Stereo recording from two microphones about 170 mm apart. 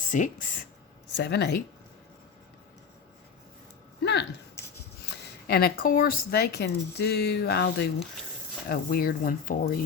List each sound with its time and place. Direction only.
0.1 s speech: 50° left (ahead or behind)
1.2 s speech: 80° left
4.0 s a sound: 90° left
5.0 s speech: 65° left (ahead or behind)